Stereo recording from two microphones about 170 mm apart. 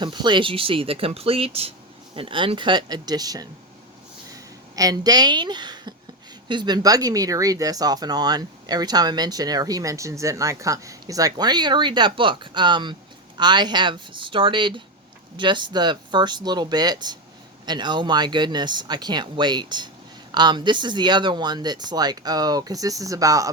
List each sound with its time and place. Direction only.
0.0 s speech: 25° right (ahead or behind)
4.7 s a woman's voice: 20° right (ahead or behind)